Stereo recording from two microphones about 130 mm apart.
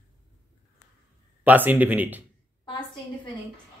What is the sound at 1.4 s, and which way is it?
Speech, 15° right (ahead or behind).